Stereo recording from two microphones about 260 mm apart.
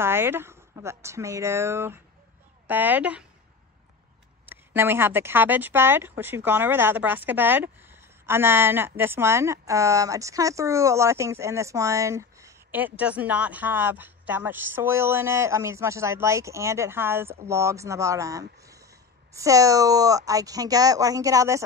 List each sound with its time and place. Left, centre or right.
0.0 s speech: centre
4.5 s speech: centre